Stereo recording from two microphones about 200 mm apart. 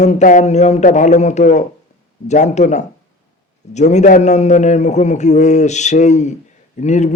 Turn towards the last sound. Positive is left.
turn(degrees=35)  # may be behind; listen again after turning